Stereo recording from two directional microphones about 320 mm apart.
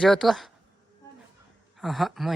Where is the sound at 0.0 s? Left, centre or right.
Centre.